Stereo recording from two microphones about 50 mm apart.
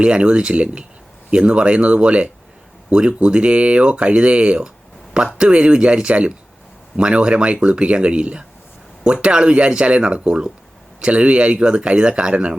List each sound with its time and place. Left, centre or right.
0.0 s speech: centre